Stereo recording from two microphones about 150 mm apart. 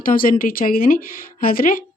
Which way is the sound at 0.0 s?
65° left (ahead or behind).